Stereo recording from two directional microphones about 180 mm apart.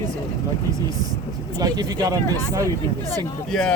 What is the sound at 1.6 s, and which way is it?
Speech, 20° right (ahead or behind).